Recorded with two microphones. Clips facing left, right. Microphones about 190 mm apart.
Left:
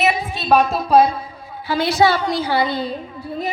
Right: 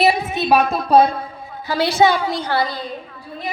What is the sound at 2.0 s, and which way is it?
Speech, 15° right (ahead or behind).